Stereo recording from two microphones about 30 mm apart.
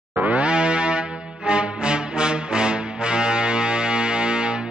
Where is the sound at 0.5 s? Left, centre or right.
Right.